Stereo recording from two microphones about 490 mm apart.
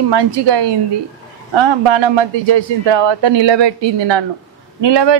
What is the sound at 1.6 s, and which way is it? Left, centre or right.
Speech, right.